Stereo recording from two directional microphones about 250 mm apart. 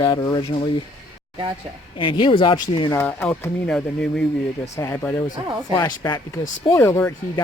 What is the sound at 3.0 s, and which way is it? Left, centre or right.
Speech, centre.